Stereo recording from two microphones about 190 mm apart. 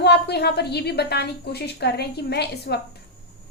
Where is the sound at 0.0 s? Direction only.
60° left (ahead or behind).